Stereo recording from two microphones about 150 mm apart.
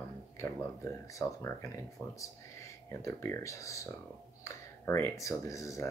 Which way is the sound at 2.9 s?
20° left (ahead or behind).